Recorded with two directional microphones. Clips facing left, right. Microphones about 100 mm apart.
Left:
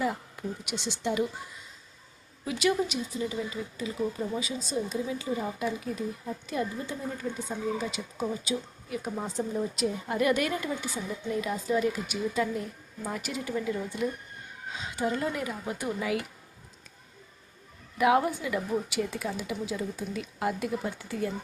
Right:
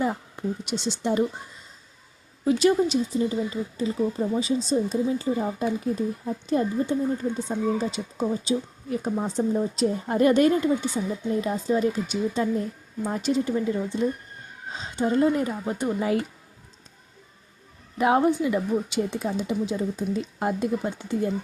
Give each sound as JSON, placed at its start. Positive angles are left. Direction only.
{"t": 0.0, "sound": "speech", "side_deg": -30}
{"t": 2.4, "sound": "speech", "side_deg": -35}
{"t": 17.9, "sound": "a woman's voice", "side_deg": -30}